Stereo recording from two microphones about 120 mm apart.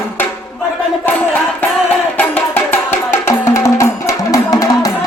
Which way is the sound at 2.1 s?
15° left (ahead or behind).